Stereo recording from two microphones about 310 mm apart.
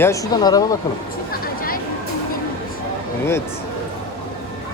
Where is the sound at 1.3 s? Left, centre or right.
Left.